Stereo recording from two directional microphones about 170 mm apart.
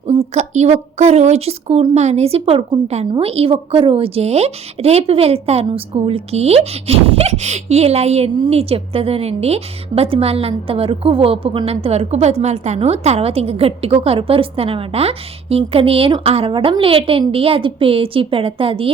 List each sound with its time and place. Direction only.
0.1 s a woman's voice: 35° right (ahead or behind)